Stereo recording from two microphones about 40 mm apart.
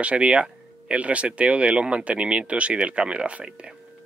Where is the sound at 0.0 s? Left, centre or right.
Right.